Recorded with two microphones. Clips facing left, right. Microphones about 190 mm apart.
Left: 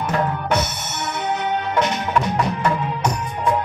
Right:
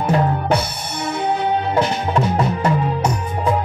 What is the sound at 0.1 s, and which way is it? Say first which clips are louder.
Drum: right 4 dB; 35° right (ahead or behind).